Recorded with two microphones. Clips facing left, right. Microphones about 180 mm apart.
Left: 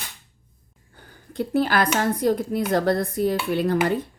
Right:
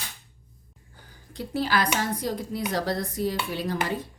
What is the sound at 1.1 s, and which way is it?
Speech, 55° left (ahead or behind).